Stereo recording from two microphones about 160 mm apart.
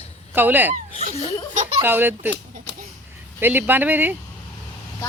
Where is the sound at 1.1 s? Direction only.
40° left (ahead or behind).